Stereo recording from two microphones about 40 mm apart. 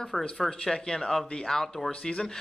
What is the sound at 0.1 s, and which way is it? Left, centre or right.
Speech, centre.